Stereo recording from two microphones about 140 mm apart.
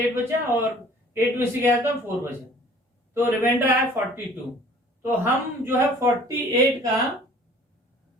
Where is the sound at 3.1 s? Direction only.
15° right (ahead or behind).